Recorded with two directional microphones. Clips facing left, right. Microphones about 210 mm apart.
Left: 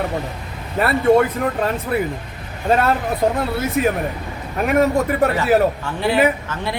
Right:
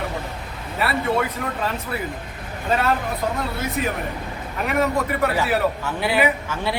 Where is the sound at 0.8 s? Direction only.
50° left (ahead or behind).